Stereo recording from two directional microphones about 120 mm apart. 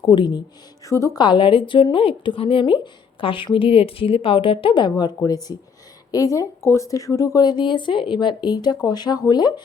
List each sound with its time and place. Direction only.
0.0 s speech: 40° left (ahead or behind)
0.9 s a woman's voice: 25° left (ahead or behind)
1.2 s speech: 40° left (ahead or behind)